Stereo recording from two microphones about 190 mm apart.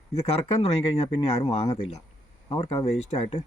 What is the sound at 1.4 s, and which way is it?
Speech, 35° left (ahead or behind).